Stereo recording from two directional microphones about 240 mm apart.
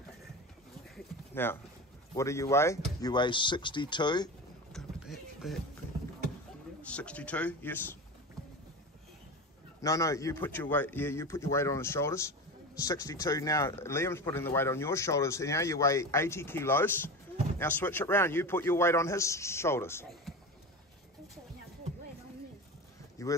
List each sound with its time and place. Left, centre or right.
0.9 s a sound: centre
2.1 s a man's voice: centre
4.7 s a sound: centre
6.9 s a man's voice: centre
9.8 s a man's voice: centre
23.2 s speech: centre